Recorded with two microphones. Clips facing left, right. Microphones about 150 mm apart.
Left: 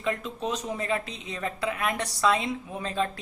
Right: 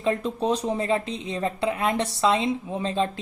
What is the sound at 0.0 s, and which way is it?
Speech, 30° right (ahead or behind).